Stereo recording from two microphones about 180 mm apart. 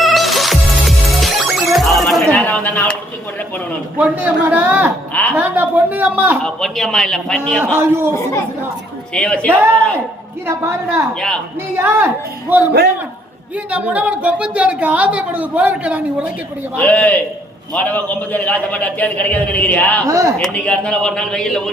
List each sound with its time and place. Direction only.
0.0 s music: centre (ahead or behind)
3.9 s a woman's voice: 10° right (ahead or behind)
5.4 s a sound: 10° right (ahead or behind)
6.4 s a man's voice: centre (ahead or behind)
7.8 s a woman's voice: 15° right (ahead or behind)
9.1 s a man's voice: 5° left (ahead or behind)
9.5 s a woman's voice: 15° right (ahead or behind)
11.1 s a man's voice: 5° left (ahead or behind)
11.8 s a woman's voice: 10° right (ahead or behind)
13.7 s a woman's voice: 10° right (ahead or behind)
16.7 s a man's voice: 5° left (ahead or behind)
20.1 s a woman's voice: 20° right (ahead or behind)
20.4 s a man's voice: 5° left (ahead or behind)